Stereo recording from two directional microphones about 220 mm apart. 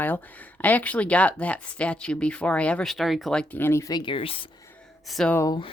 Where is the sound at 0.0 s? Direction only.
5° left (ahead or behind); by 4.4 s 25° left (ahead or behind).